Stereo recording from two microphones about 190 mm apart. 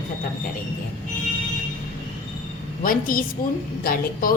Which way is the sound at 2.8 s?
45° left (ahead or behind).